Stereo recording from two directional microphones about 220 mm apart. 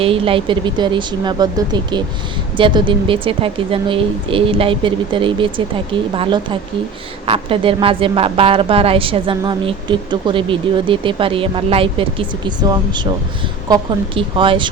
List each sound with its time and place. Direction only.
0.0 s a woman's voice: 25° right (ahead or behind)